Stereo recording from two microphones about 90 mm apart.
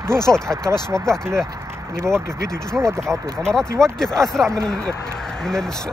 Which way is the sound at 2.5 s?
30° right (ahead or behind).